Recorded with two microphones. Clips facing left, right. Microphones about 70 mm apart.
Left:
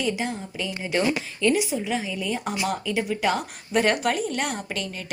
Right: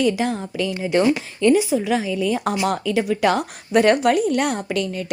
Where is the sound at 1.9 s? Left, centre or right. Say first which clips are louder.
Right 7 dB; right.